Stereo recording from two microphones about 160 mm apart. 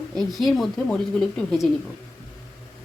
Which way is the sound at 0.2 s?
Centre (ahead or behind).